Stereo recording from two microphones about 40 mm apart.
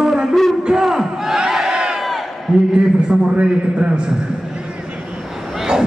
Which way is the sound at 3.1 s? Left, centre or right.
Right.